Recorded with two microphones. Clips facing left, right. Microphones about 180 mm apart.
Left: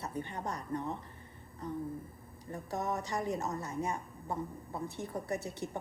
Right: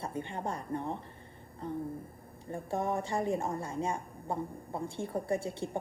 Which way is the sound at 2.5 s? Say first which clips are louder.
Right 3 dB; 25° right (ahead or behind).